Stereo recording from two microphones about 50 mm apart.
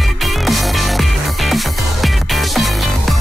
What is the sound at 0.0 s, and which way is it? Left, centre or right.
Music, centre.